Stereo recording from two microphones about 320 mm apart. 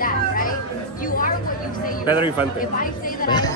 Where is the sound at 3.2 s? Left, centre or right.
Centre.